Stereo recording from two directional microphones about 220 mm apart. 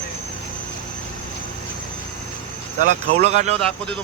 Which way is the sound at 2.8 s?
30° right (ahead or behind).